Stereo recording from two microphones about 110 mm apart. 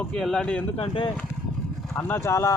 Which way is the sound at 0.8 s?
50° left (ahead or behind).